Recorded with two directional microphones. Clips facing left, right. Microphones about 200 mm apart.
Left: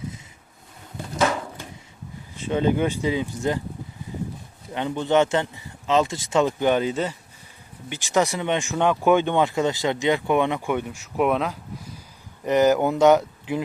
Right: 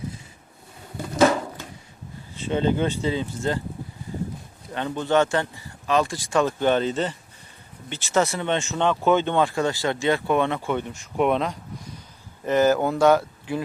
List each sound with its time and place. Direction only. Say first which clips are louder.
2.5 s speech: left 1 dB; 10° left (ahead or behind)
4.7 s speech: left 1 dB; 15° left (ahead or behind)
12.5 s speech: left 1 dB; 15° left (ahead or behind)